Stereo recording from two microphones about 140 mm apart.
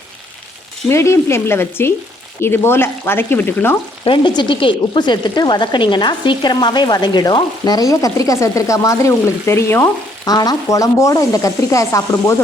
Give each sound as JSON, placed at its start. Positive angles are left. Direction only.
{"t": 0.9, "sound": "speech", "side_deg": 20}
{"t": 4.0, "sound": "speech", "side_deg": 35}